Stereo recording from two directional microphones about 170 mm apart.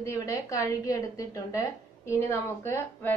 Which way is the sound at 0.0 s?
20° left (ahead or behind).